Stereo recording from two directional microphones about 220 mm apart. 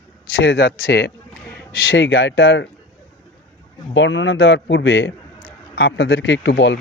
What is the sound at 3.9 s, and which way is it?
Speech, 55° left (ahead or behind).